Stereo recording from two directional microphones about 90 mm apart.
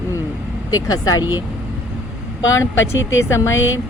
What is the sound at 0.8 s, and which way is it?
Speech, 45° left (ahead or behind).